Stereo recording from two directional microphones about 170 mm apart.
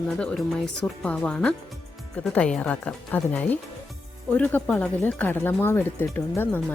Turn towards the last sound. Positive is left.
turn(degrees=10)  # may be behind; listen again after turning